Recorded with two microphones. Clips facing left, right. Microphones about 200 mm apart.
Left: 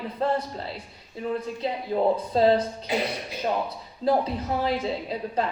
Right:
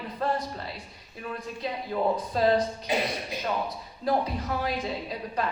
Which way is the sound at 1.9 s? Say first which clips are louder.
Left 4 dB; 25° left (ahead or behind).